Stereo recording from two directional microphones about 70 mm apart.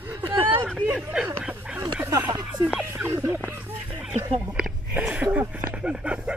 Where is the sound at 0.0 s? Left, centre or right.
Right.